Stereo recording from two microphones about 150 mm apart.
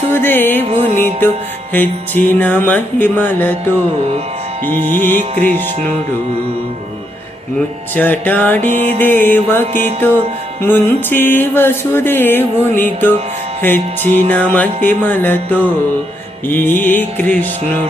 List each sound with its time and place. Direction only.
0.1 s music: 15° left (ahead or behind)
0.7 s music: 45° right (ahead or behind)
1.7 s music: 10° left (ahead or behind)
5.3 s music: 55° right (ahead or behind)
7.9 s music: 10° left (ahead or behind)
8.5 s music: 50° right (ahead or behind)
9.0 s music: 10° left (ahead or behind)
10.7 s music: 15° left (ahead or behind)